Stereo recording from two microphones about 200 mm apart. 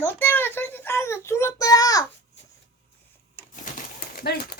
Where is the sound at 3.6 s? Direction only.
45° left (ahead or behind).